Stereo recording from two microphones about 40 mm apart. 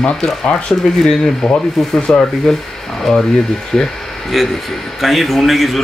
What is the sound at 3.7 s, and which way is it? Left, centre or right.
Speech, centre.